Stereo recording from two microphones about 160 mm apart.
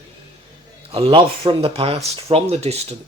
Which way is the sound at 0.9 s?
35° right (ahead or behind).